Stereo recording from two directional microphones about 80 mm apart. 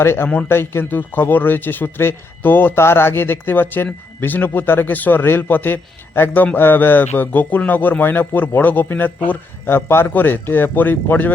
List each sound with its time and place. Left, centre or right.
0.0 s a man's voice: left